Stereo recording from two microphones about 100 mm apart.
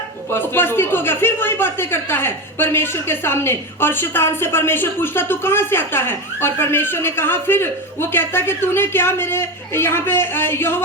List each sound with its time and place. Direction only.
0.3 s a man's voice: 20° left (ahead or behind)